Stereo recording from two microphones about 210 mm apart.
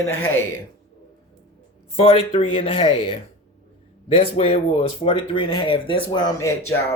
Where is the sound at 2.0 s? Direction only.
25° left (ahead or behind).